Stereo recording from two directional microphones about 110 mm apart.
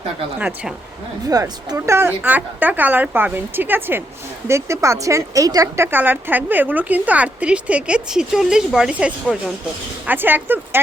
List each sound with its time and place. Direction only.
0.3 s speech: 10° right (ahead or behind)
1.3 s speech: 30° right (ahead or behind)